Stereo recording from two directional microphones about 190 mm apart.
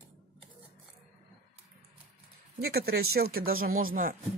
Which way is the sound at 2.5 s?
55° right (ahead or behind).